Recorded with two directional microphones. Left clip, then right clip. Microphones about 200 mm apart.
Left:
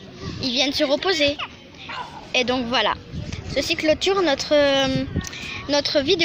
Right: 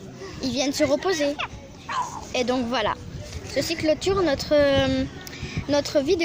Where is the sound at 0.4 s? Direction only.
10° right (ahead or behind).